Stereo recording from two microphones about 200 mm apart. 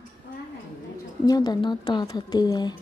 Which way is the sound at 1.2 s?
20° left (ahead or behind).